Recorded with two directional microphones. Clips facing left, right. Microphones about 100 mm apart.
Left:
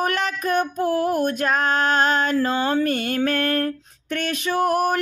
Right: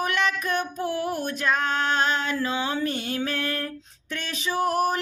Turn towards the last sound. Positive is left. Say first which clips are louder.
# left 4 dB
turn(degrees=55)  # may be behind; listen again after turning